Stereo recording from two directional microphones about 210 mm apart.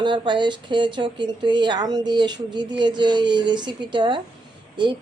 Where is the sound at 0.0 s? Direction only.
20° right (ahead or behind).